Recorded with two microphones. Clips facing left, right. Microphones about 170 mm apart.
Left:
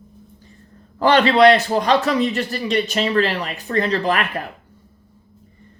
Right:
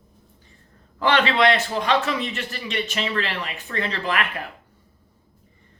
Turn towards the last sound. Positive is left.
turn(degrees=40)  # may be behind; listen again after turning